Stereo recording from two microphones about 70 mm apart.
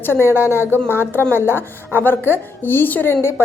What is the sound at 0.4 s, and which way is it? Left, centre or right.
A woman's voice, left.